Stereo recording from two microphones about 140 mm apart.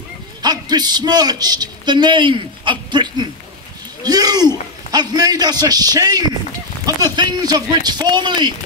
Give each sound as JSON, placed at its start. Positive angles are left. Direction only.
{"t": 0.4, "sound": "a man's voice", "side_deg": -30}